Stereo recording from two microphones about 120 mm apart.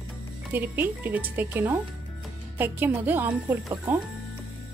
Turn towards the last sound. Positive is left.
turn(degrees=-15)  # may be behind; listen again after turning